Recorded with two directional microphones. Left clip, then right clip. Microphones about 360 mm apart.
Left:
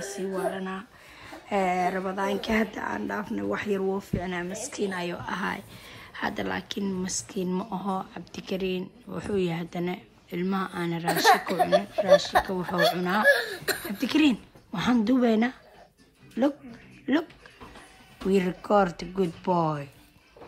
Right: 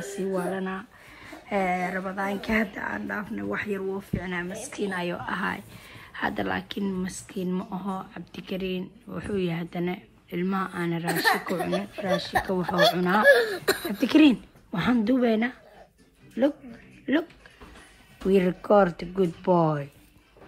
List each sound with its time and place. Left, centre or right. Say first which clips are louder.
0.0 s a woman's voice: right 1 dB; centre
11.3 s speech: left 2 dB; centre
11.6 s a woman's voice: left 6 dB; centre
17.1 s a woman's voice: right 1 dB; centre
18.3 s a woman's voice: right 3 dB; centre